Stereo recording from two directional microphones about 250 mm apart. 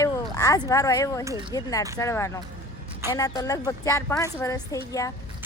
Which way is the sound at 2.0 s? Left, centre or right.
Centre.